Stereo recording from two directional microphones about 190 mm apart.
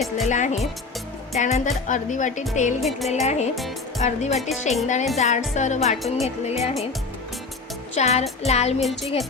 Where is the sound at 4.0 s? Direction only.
35° left (ahead or behind).